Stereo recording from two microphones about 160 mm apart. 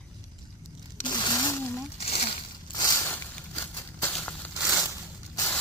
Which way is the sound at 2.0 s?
40° left (ahead or behind).